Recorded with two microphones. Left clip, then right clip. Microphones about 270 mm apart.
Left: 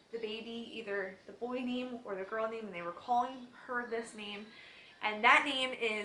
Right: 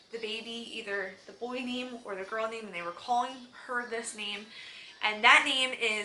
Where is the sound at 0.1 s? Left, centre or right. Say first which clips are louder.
Right 4 dB; centre.